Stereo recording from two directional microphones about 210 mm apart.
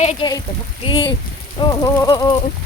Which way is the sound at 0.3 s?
20° left (ahead or behind).